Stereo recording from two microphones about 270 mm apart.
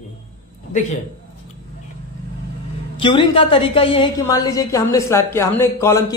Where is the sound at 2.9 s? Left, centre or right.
Centre.